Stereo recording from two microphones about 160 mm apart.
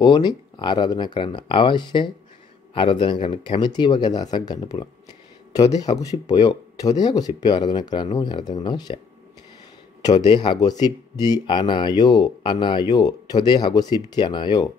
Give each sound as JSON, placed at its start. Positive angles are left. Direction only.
{"t": 0.0, "sound": "speech", "side_deg": 25}
{"t": 10.0, "sound": "speech", "side_deg": 25}